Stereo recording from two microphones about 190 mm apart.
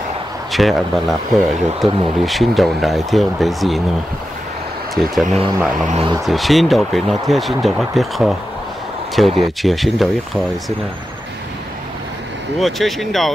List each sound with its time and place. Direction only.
0.5 s speech: centre (ahead or behind)
4.9 s speech: centre (ahead or behind)
5.9 s speech: 30° right (ahead or behind)
6.2 s speech: centre (ahead or behind)
12.5 s speech: centre (ahead or behind)